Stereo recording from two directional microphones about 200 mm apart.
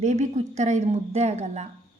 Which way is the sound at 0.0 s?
35° right (ahead or behind).